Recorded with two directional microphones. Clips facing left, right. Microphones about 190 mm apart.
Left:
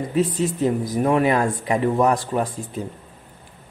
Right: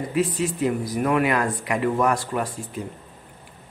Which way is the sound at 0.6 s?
25° left (ahead or behind).